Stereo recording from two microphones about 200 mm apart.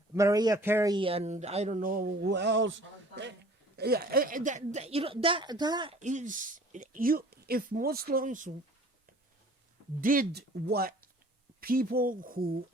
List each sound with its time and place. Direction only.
0.1 s a man's voice: 15° right (ahead or behind)
0.9 s speech: 25° right (ahead or behind); by 3.3 s 65° right (ahead or behind)
3.8 s speech: 50° right (ahead or behind); by 6.0 s 20° right (ahead or behind)
6.0 s speech: 35° right (ahead or behind)
10.0 s speech: 45° right (ahead or behind)